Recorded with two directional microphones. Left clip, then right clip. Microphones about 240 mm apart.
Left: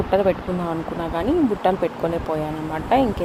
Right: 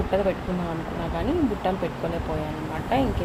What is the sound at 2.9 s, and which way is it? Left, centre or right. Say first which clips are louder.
Speech: left 6 dB; left.